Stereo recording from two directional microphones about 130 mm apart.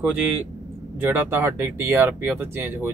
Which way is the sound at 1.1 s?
15° right (ahead or behind).